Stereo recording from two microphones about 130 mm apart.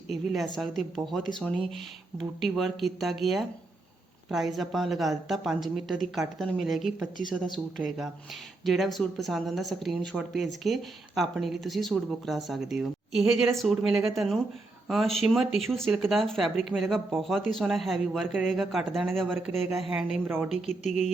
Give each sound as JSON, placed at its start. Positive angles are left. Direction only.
{"t": 0.1, "sound": "speech", "side_deg": 0}
{"t": 19.9, "sound": "speech", "side_deg": -10}
{"t": 20.7, "sound": "speech", "side_deg": 60}